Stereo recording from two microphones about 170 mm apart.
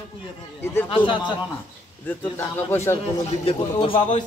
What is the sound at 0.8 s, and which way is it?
Speech, 30° left (ahead or behind).